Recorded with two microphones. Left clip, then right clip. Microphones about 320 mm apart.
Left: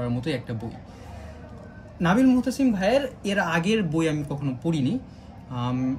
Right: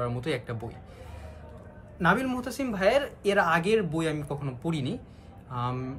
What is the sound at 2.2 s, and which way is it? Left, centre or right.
Speech, right.